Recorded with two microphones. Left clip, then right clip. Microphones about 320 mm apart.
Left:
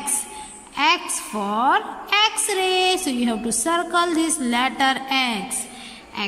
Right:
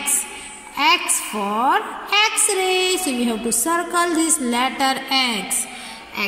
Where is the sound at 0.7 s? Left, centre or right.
Centre.